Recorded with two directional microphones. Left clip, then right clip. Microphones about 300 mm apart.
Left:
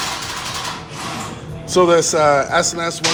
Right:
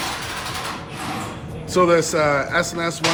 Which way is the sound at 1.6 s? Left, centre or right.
Centre.